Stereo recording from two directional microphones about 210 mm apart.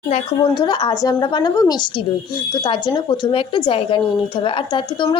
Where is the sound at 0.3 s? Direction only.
20° left (ahead or behind).